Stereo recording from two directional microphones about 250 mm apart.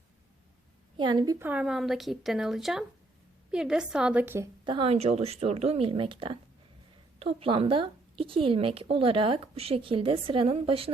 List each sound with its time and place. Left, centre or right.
0.9 s a woman's voice: centre
4.6 s a woman's voice: centre